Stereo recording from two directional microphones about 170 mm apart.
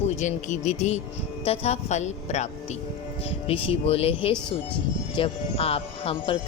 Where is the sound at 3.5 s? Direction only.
35° left (ahead or behind).